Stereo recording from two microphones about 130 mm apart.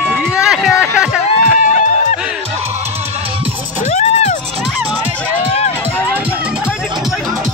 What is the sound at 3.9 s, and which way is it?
Music, 60° left (ahead or behind).